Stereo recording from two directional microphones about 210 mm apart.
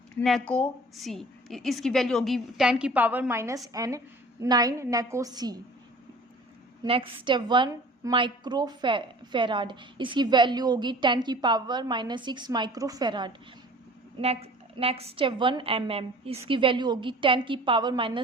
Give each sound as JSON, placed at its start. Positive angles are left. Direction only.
{"t": 0.2, "sound": "a woman's voice", "side_deg": 5}
{"t": 6.8, "sound": "a woman's voice", "side_deg": -25}